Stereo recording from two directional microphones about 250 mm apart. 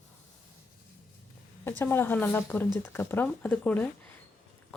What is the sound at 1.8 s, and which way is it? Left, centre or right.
Speech, centre.